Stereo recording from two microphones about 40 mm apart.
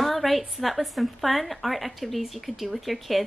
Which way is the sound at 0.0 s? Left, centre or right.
Centre.